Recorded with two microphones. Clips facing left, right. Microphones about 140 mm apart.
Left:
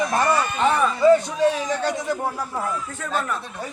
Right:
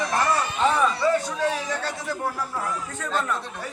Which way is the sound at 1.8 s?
20° left (ahead or behind).